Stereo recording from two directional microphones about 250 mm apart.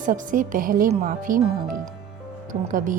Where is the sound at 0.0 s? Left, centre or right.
Right.